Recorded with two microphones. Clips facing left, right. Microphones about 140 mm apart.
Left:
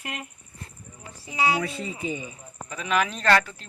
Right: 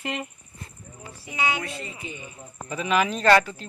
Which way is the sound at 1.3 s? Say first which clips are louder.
Left 3 dB; 35° left (ahead or behind).